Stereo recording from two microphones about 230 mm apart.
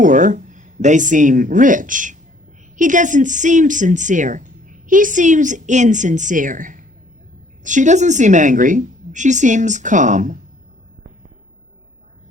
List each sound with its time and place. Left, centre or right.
0.0 s speech: right